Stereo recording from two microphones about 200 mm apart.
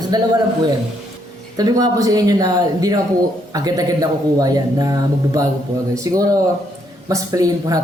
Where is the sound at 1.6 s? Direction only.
20° right (ahead or behind).